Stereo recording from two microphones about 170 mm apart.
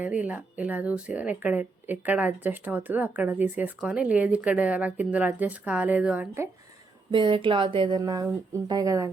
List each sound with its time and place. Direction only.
0.0 s speech: 10° right (ahead or behind)
7.1 s speech: 30° right (ahead or behind)